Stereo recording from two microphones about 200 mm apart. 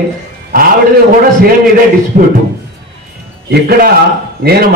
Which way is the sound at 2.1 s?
45° right (ahead or behind).